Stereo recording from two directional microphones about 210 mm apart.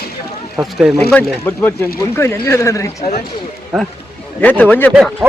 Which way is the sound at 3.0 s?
35° left (ahead or behind).